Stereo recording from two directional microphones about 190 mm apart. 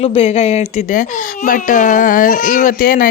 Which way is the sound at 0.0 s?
30° left (ahead or behind).